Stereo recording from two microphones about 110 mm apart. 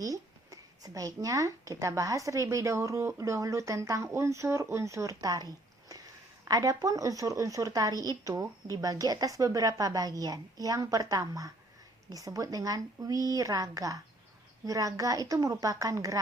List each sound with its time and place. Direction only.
0.0 s speech: 30° right (ahead or behind)